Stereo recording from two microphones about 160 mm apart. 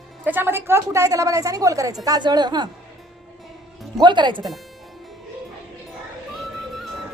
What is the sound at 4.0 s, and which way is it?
Speech, 30° right (ahead or behind).